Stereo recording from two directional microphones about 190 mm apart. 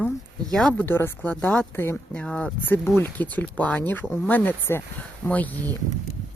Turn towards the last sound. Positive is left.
turn(degrees=10)  # may be behind; listen again after turning